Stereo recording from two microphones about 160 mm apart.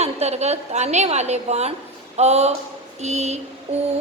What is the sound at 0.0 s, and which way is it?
A woman's voice, 40° right (ahead or behind).